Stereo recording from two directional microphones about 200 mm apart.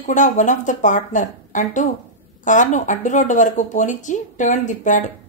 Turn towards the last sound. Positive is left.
turn(degrees=40)  # may be behind; listen again after turning